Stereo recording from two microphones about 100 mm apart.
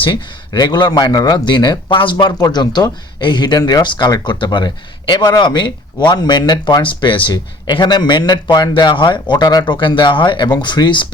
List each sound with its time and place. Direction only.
0.0 s speech: 50° left (ahead or behind)
2.1 s speech: 40° left (ahead or behind)
9.3 s speech: 45° left (ahead or behind)